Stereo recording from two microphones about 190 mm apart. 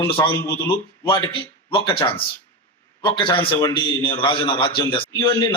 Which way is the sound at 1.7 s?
30° left (ahead or behind).